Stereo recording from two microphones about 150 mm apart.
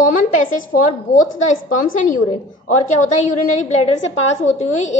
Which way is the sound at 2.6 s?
55° left (ahead or behind).